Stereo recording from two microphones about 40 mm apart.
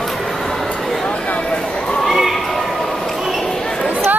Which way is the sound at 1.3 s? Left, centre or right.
Left.